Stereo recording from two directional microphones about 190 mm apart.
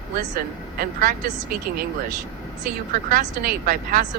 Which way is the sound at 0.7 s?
50° right (ahead or behind).